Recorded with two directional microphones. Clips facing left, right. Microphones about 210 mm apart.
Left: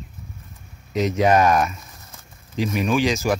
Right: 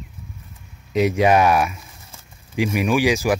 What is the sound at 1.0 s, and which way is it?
Speech, 10° right (ahead or behind).